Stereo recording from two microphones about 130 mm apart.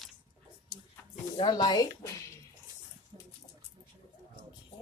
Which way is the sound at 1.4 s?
40° left (ahead or behind).